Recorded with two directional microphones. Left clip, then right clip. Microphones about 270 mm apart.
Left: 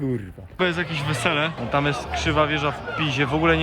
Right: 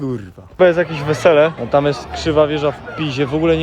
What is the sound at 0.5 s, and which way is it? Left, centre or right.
Speech, centre.